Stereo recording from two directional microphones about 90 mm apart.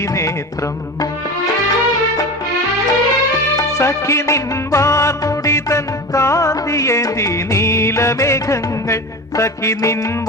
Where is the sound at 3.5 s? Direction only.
35° left (ahead or behind).